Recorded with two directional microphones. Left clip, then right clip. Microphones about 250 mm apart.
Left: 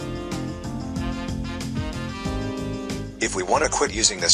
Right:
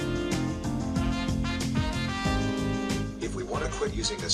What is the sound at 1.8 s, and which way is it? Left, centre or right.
Music, centre.